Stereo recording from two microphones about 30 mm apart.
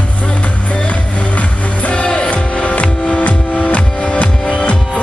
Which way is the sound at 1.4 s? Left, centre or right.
Left.